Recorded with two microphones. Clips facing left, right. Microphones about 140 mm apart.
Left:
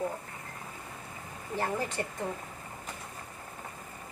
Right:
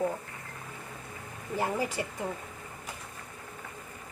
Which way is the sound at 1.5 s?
10° right (ahead or behind).